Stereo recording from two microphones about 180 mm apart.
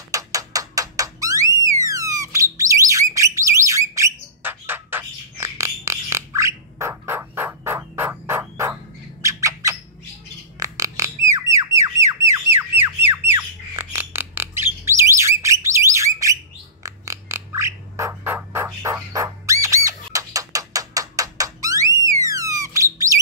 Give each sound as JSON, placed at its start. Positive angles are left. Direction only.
{"t": 0.1, "sound": "music", "side_deg": -20}
{"t": 9.2, "sound": "squawk", "side_deg": -15}
{"t": 13.3, "sound": "bird", "side_deg": -10}